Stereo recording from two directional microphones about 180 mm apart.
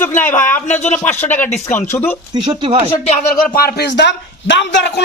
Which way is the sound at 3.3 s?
60° left (ahead or behind).